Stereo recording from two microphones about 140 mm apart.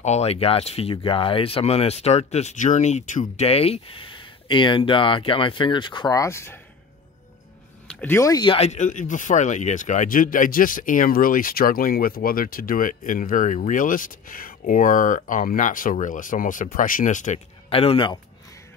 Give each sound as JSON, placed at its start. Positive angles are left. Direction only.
{"t": 0.0, "sound": "speech", "side_deg": 50}
{"t": 7.9, "sound": "a sound", "side_deg": 10}
{"t": 8.2, "sound": "speech", "side_deg": 25}
{"t": 8.5, "sound": "speech", "side_deg": 50}
{"t": 17.6, "sound": "speech", "side_deg": 40}